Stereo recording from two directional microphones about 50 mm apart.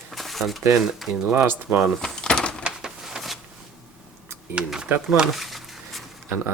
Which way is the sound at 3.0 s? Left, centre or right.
Centre.